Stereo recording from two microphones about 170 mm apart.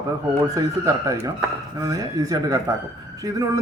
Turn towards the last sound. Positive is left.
turn(degrees=-20)  # may be behind; listen again after turning